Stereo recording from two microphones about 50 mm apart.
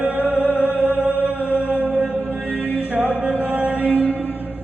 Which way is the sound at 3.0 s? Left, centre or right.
Right.